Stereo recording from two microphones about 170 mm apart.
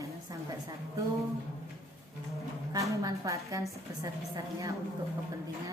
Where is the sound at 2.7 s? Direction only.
20° right (ahead or behind).